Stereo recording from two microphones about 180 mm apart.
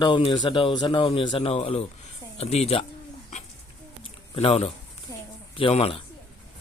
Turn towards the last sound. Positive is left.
turn(degrees=30)  # may be behind; listen again after turning